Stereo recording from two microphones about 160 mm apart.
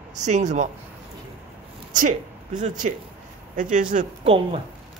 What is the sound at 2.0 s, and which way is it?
Speech, 50° right (ahead or behind).